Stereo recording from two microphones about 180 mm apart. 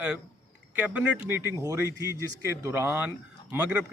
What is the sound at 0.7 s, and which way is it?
A man's voice, 10° right (ahead or behind).